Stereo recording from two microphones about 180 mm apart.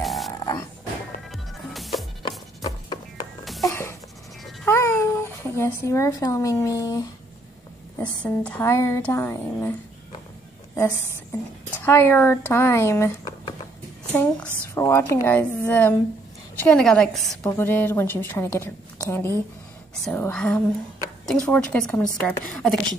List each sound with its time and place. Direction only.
0.0 s a sound: centre (ahead or behind)
1.3 s music: centre (ahead or behind)
2.2 s music: 25° left (ahead or behind)
3.6 s a sound: 15° left (ahead or behind)
4.6 s babbling: 15° left (ahead or behind)
8.0 s a woman's voice: 5° left (ahead or behind)
11.8 s a woman's voice: 15° left (ahead or behind)
14.1 s a woman's voice: 5° left (ahead or behind)
17.5 s a woman's voice: 10° left (ahead or behind)